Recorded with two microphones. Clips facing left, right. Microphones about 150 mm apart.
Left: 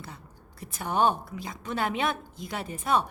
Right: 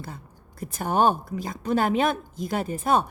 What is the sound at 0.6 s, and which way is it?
A woman's voice, 45° right (ahead or behind).